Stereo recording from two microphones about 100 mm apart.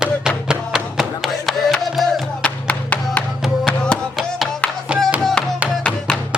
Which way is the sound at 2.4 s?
15° left (ahead or behind).